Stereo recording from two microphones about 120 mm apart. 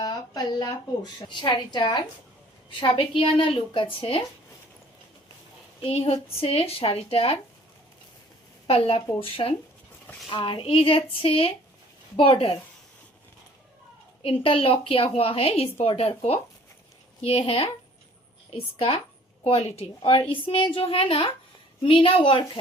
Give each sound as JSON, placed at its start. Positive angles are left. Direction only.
{"t": 0.0, "sound": "a woman's voice", "side_deg": 35}
{"t": 5.8, "sound": "a woman's voice", "side_deg": 55}
{"t": 8.6, "sound": "a woman's voice", "side_deg": 55}
{"t": 14.2, "sound": "a woman's voice", "side_deg": 50}